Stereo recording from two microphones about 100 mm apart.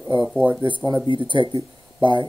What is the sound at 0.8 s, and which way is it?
Speech, 40° right (ahead or behind).